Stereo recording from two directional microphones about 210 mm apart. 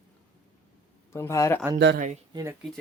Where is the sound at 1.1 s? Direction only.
15° left (ahead or behind).